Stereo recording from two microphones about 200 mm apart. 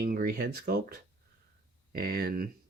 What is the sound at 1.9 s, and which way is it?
Speech, 50° right (ahead or behind).